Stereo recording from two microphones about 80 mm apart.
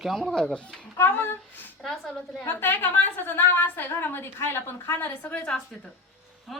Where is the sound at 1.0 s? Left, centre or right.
Left.